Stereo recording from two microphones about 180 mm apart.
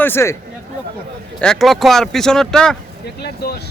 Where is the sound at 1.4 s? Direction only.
Centre (ahead or behind).